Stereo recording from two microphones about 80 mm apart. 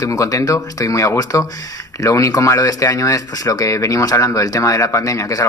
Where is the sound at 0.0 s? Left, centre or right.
Left.